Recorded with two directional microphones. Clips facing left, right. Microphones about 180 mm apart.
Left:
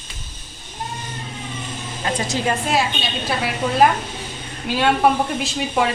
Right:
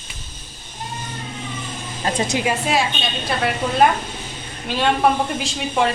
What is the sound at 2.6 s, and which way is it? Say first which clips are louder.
A woman's voice: even; centre (ahead or behind).